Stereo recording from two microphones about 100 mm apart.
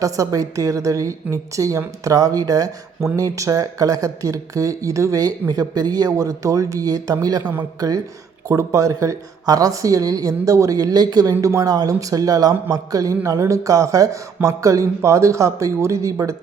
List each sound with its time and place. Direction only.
0.0 s a woman's voice: 35° right (ahead or behind)